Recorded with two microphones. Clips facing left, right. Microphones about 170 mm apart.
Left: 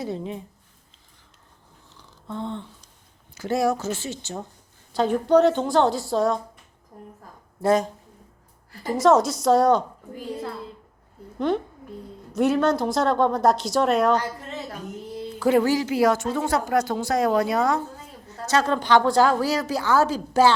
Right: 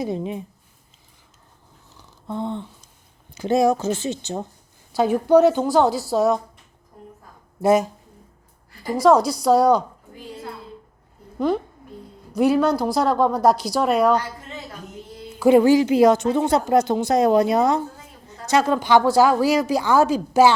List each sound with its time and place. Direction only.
0.0 s a woman's voice: 15° right (ahead or behind)
2.0 s a sound: 15° right (ahead or behind)
3.3 s a woman's voice: 20° right (ahead or behind)
7.6 s a woman's voice: 10° right (ahead or behind)
9.0 s a woman's voice: centre (ahead or behind)
11.3 s a child's voice: 5° right (ahead or behind)
15.4 s a woman's voice: 15° right (ahead or behind)
18.3 s a woman's voice: 10° right (ahead or behind)